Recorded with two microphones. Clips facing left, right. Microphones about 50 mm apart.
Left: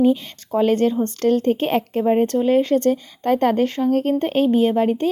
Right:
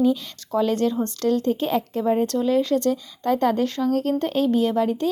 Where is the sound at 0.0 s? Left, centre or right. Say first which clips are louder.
Left 3 dB; left.